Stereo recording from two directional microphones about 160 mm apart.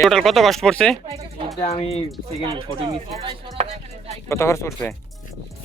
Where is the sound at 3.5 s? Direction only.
40° right (ahead or behind).